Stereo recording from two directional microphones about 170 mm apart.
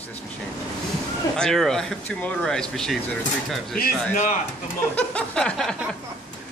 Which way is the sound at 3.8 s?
50° left (ahead or behind).